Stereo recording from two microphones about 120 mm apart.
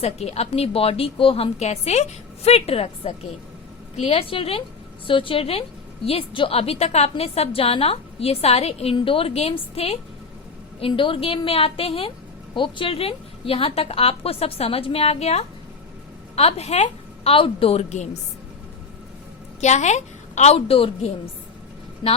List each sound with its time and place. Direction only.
0.0 s a woman's voice: 60° left (ahead or behind)
17.3 s a woman's voice: 50° left (ahead or behind); by 18.1 s 70° left (ahead or behind)
19.6 s a woman's voice: 75° left (ahead or behind); by 21.1 s 50° left (ahead or behind)
22.0 s speech: 40° left (ahead or behind)